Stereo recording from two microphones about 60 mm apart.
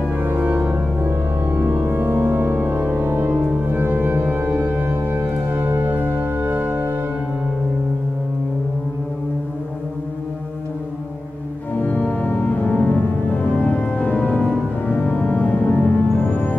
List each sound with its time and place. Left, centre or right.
0.2 s organ: right
11.9 s organ: left
14.9 s music: left